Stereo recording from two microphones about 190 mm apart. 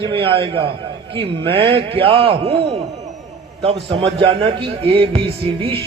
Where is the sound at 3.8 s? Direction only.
30° right (ahead or behind).